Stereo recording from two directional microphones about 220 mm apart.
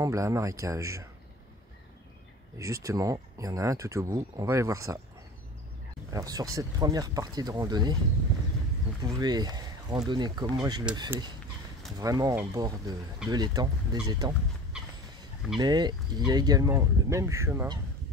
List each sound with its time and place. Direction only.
0.0 s speech: 15° right (ahead or behind)
2.6 s speech: 15° right (ahead or behind)
6.0 s speech: 15° right (ahead or behind)
9.0 s speech: 20° right (ahead or behind)
14.7 s a sound: 5° right (ahead or behind)
15.5 s speech: 20° right (ahead or behind)